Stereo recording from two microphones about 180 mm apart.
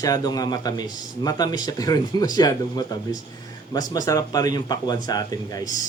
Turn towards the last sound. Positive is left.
turn(degrees=20)  # may be behind; listen again after turning